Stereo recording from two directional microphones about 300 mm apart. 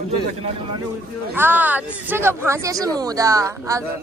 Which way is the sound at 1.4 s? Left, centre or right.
Centre.